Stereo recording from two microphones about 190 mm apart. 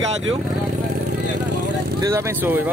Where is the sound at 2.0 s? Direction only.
15° right (ahead or behind).